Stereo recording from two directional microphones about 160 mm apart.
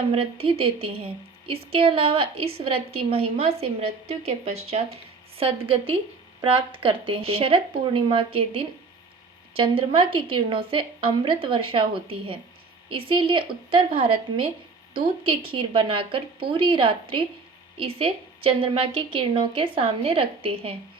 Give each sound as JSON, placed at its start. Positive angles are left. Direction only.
{"t": 0.1, "sound": "a woman's voice", "side_deg": -35}
{"t": 5.4, "sound": "a woman's voice", "side_deg": -35}